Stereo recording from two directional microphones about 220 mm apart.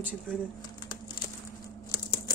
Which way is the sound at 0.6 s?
20° left (ahead or behind).